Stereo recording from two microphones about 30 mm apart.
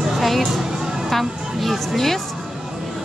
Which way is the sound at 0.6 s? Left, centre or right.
Centre.